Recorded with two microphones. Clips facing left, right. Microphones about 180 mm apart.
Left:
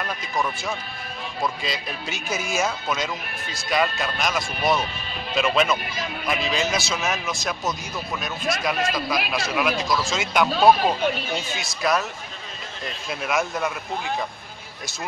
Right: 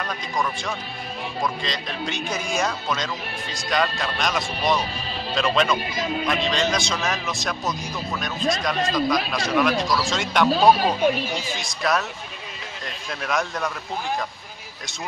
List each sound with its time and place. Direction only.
0.0 s a man's voice: 5° left (ahead or behind)